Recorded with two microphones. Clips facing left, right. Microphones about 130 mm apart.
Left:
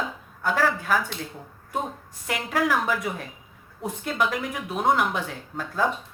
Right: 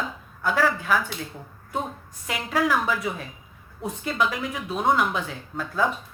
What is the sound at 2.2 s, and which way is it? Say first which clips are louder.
A woman's voice: even; 50° left (ahead or behind).